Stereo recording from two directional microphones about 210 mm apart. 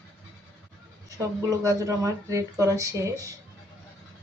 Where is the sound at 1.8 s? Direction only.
15° right (ahead or behind).